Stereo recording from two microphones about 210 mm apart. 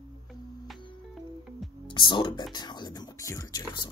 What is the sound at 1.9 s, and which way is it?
Speech, 20° left (ahead or behind).